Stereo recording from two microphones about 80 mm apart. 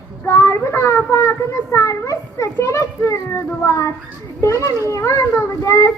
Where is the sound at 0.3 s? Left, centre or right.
Left.